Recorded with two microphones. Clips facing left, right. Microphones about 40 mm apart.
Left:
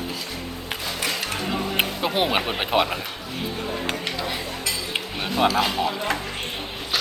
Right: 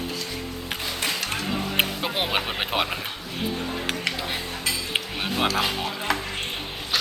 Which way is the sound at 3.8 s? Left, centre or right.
Centre.